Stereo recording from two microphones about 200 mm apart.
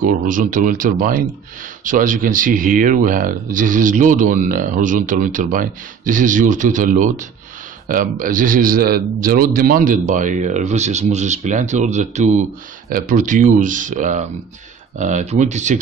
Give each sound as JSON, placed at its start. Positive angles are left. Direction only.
{"t": 0.0, "sound": "speech", "side_deg": -40}